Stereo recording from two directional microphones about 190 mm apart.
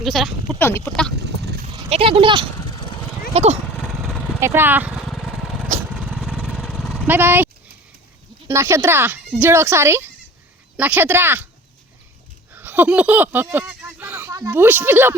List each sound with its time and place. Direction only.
0.0 s speech: centre (ahead or behind)
1.1 s a sound: 60° right (ahead or behind)
1.9 s speech: 30° right (ahead or behind)
4.4 s speech: 15° right (ahead or behind)
5.0 s vehicle: centre (ahead or behind)
8.4 s speech: 15° right (ahead or behind)
12.5 s speech: 10° right (ahead or behind)